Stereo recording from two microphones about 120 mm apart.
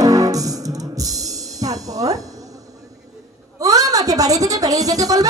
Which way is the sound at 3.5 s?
30° right (ahead or behind).